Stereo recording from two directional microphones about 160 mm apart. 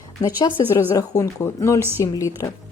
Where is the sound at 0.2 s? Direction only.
25° left (ahead or behind).